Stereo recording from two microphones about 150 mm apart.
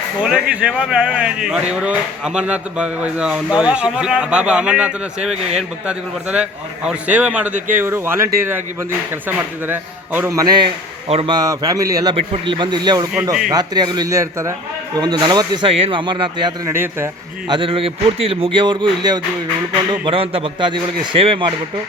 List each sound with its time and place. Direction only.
0.2 s speech: 10° right (ahead or behind)
9.6 s a man's voice: 15° right (ahead or behind)
11.1 s speech: 40° right (ahead or behind)
11.3 s a man's voice: 25° right (ahead or behind)
12.1 s a man's voice: 35° right (ahead or behind)
16.6 s speech: 15° right (ahead or behind)
17.5 s speech: 35° right (ahead or behind)